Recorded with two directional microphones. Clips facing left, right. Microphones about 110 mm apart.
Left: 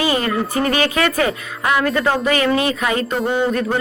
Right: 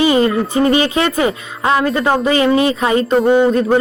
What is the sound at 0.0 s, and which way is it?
Speech, 25° right (ahead or behind).